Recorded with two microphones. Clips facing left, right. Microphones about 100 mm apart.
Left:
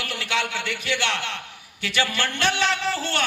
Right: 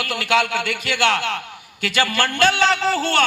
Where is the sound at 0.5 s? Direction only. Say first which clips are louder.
Right 4 dB; 45° right (ahead or behind).